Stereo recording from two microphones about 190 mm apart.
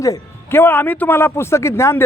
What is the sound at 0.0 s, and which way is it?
A man's voice, 15° left (ahead or behind).